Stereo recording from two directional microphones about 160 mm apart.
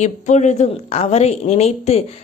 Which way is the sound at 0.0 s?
45° left (ahead or behind).